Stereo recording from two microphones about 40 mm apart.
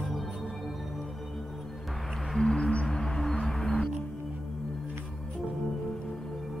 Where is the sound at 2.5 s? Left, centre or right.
Left.